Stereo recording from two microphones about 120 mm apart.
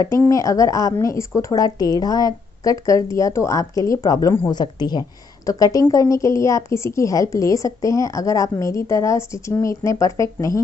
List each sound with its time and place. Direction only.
0.3 s a woman's voice: 25° left (ahead or behind)